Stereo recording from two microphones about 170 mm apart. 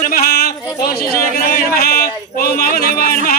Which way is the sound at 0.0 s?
60° left (ahead or behind).